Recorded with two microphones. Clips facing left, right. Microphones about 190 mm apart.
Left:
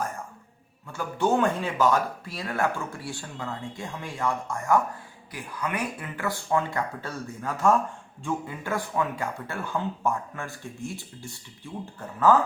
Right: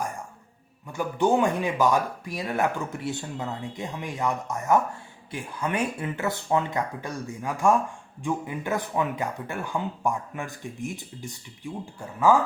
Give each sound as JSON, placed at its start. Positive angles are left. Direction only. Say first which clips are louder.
{"t": 0.9, "sound": "speech", "louder": "right 2 dB", "side_deg": -15}